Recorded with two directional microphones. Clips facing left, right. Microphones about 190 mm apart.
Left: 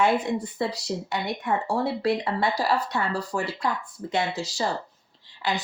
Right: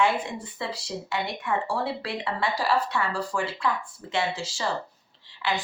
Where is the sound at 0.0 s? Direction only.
40° left (ahead or behind).